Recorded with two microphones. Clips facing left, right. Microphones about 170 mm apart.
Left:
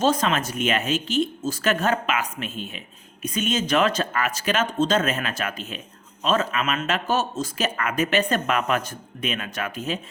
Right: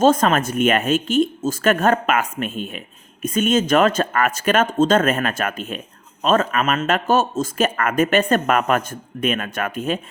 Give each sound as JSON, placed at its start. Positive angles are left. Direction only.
{"t": 0.0, "sound": "speech", "side_deg": -50}